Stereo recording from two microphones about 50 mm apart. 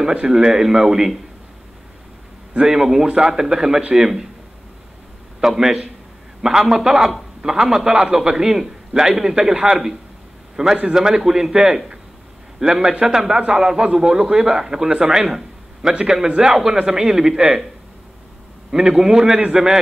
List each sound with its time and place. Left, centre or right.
0.3 s a man's voice: centre
2.5 s a man's voice: centre
5.4 s a man's voice: centre
18.7 s a man's voice: centre